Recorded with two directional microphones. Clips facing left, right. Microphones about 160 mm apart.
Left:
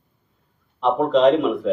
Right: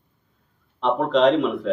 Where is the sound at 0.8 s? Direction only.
5° left (ahead or behind).